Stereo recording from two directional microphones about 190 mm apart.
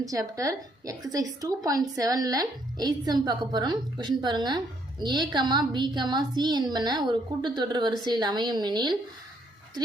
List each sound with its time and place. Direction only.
0.0 s a woman's voice: 20° right (ahead or behind)